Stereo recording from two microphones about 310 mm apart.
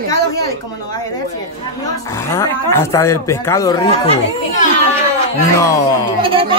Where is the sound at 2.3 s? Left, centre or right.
Centre.